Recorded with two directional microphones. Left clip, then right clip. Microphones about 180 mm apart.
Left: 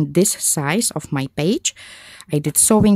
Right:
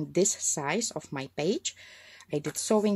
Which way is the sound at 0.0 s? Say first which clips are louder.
Left 9 dB; 45° left (ahead or behind).